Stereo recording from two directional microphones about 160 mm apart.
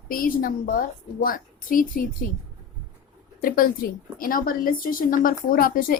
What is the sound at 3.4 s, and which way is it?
Speech, 65° left (ahead or behind).